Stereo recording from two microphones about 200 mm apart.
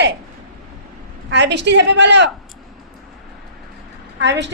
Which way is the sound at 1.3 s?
60° right (ahead or behind).